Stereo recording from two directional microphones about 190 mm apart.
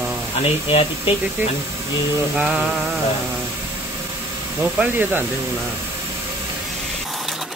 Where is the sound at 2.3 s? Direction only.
5° right (ahead or behind).